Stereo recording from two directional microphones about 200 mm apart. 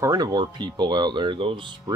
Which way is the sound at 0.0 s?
20° right (ahead or behind).